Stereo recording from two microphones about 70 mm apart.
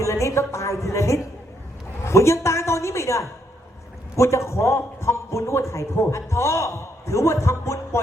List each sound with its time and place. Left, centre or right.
0.0 s a man's voice: left